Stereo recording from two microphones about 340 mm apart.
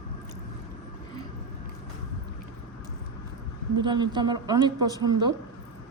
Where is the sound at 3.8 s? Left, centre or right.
Centre.